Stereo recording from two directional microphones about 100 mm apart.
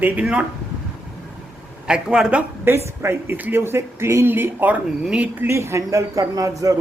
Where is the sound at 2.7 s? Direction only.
25° right (ahead or behind).